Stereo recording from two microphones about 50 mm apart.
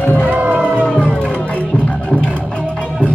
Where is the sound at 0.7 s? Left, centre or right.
Left.